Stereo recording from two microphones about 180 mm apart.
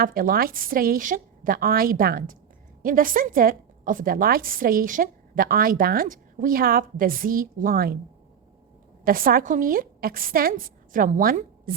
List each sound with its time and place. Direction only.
0.0 s a woman's voice: 55° right (ahead or behind)
9.0 s a woman's voice: 55° right (ahead or behind)